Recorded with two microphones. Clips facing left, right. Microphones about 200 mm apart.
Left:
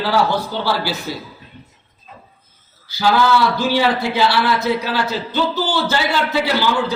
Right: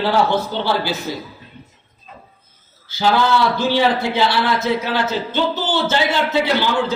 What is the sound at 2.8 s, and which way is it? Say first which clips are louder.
A man's voice: left 1 dB; 20° right (ahead or behind).